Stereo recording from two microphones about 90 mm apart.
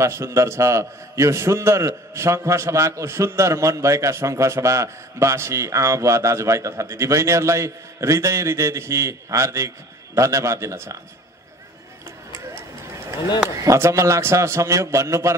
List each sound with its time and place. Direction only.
0.0 s a man's voice: 30° right (ahead or behind)
13.6 s a man's voice: 35° right (ahead or behind)